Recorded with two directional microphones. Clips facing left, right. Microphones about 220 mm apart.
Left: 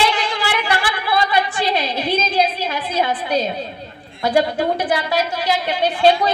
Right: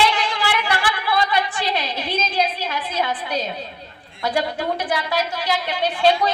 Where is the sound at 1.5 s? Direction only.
30° left (ahead or behind).